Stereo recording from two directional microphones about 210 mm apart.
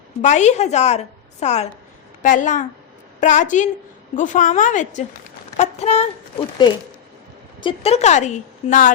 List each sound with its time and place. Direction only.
0.2 s a woman's voice: 35° left (ahead or behind)
6.6 s a woman's voice: 20° left (ahead or behind); by 8.9 s 35° left (ahead or behind)